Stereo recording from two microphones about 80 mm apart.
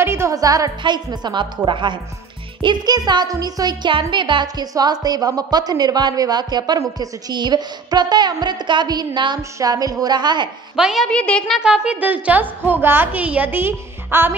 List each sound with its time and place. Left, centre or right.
0.0 s music: right
0.3 s a woman's voice: right
0.8 s a woman's voice: right
2.6 s speech: right
9.4 s a woman's voice: right
10.8 s a woman's voice: centre
11.1 s a child's voice: centre
11.6 s a woman's voice: centre; by 14.3 s right